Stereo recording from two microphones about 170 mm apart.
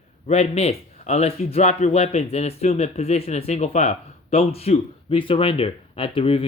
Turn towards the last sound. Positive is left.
turn(degrees=30)  # may be behind; listen again after turning